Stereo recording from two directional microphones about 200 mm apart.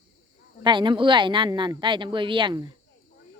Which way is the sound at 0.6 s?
25° right (ahead or behind).